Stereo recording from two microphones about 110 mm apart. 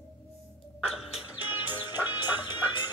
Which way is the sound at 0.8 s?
5° right (ahead or behind).